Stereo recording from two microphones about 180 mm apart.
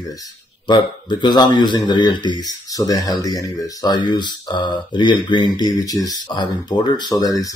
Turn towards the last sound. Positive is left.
turn(degrees=20)  # may be behind; listen again after turning